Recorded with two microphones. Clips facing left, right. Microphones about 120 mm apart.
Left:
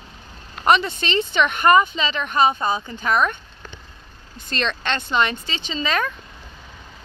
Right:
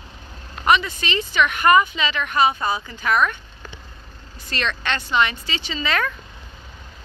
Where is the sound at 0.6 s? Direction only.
30° left (ahead or behind).